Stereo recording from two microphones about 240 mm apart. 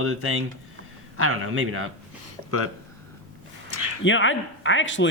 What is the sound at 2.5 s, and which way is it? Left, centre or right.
Speech, right.